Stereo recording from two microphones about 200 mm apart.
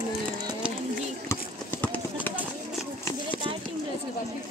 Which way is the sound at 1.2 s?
10° left (ahead or behind).